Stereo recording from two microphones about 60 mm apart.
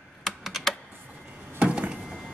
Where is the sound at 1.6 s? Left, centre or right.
Centre.